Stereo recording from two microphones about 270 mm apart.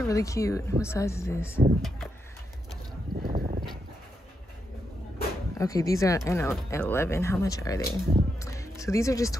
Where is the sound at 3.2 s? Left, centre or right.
Right.